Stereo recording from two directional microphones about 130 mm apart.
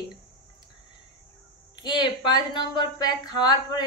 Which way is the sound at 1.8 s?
35° left (ahead or behind).